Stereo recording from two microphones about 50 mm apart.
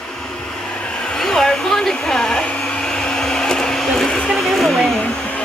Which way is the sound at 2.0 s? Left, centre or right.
Centre.